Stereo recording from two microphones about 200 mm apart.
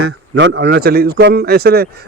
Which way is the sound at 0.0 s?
60° right (ahead or behind).